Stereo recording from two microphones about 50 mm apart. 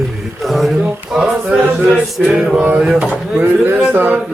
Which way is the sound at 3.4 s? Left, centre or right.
Right.